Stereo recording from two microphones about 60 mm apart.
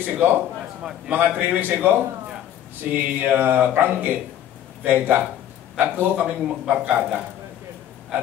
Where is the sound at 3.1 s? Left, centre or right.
Right.